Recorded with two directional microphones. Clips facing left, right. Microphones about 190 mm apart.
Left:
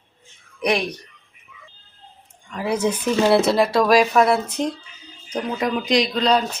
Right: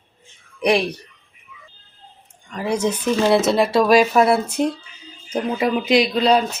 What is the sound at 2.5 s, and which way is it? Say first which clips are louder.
Speech: even; 5° left (ahead or behind).